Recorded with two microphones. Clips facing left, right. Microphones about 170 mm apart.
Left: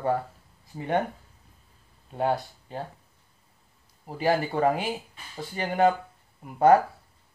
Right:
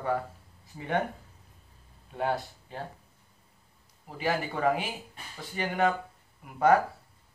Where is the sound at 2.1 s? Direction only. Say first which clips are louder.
Left 4 dB; 35° left (ahead or behind).